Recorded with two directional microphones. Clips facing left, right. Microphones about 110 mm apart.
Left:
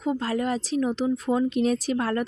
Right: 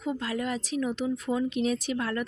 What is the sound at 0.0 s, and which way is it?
Speech, 35° left (ahead or behind).